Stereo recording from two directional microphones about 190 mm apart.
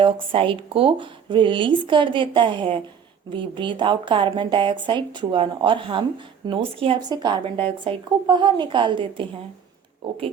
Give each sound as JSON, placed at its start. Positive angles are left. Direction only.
{"t": 0.0, "sound": "speech", "side_deg": -30}